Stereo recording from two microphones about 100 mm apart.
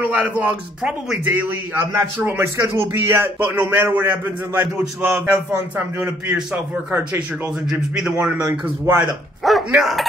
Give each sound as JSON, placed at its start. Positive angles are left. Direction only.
{"t": 0.0, "sound": "a sound", "side_deg": -15}
{"t": 0.4, "sound": "a man's voice", "side_deg": -15}
{"t": 9.4, "sound": "speech", "side_deg": 0}